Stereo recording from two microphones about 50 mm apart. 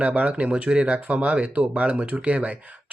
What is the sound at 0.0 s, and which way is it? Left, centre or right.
Speech, right.